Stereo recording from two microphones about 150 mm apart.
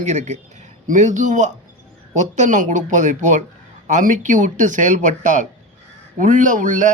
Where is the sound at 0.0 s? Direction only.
50° right (ahead or behind).